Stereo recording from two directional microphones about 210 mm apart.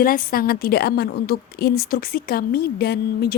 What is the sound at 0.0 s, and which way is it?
A woman's voice, 45° left (ahead or behind).